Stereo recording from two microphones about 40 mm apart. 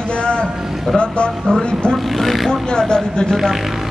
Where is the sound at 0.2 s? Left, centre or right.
Left.